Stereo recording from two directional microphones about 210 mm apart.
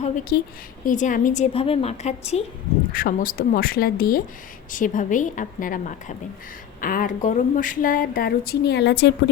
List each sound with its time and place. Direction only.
0.3 s speech: 50° left (ahead or behind)
0.9 s speech: 40° left (ahead or behind); by 9.3 s 55° left (ahead or behind)